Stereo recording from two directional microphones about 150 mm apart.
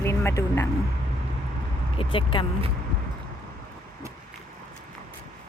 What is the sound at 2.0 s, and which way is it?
Speech, 35° left (ahead or behind).